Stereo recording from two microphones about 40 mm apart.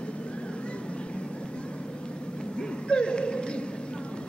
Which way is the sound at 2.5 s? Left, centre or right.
Left.